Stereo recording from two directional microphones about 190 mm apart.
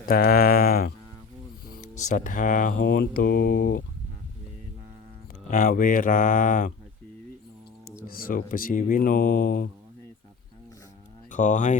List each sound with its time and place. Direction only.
0.0 s speech: 50° left (ahead or behind)
2.0 s speech: 40° left (ahead or behind)
5.5 s speech: 40° left (ahead or behind)
7.9 s speech: 50° left (ahead or behind)
11.3 s speech: 40° left (ahead or behind)